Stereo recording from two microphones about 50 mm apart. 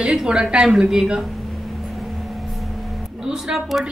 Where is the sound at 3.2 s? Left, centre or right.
Centre.